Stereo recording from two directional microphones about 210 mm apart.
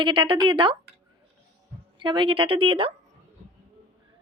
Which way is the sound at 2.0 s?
20° right (ahead or behind).